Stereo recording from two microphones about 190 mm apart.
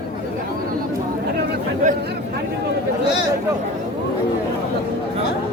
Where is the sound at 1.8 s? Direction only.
40° right (ahead or behind).